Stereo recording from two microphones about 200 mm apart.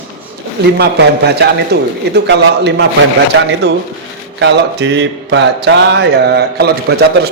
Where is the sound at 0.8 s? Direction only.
55° right (ahead or behind).